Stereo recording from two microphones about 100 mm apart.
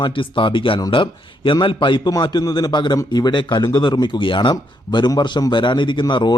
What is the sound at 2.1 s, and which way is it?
A man's voice, 45° left (ahead or behind).